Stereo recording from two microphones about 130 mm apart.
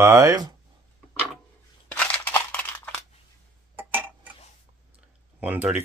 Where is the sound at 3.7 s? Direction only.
15° right (ahead or behind).